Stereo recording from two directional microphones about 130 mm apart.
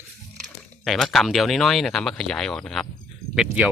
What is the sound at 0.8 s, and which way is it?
Speech, centre (ahead or behind).